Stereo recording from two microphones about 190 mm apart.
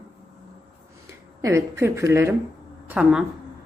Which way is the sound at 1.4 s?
15° right (ahead or behind).